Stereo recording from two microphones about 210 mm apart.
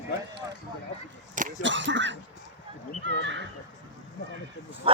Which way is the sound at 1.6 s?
60° right (ahead or behind).